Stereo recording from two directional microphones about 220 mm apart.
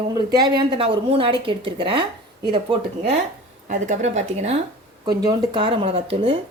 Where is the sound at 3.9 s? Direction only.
30° right (ahead or behind).